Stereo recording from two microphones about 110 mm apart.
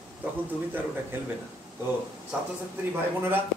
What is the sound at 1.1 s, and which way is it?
Speech, 20° right (ahead or behind).